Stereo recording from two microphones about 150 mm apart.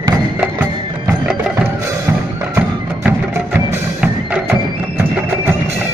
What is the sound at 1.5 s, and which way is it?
Music, 20° right (ahead or behind).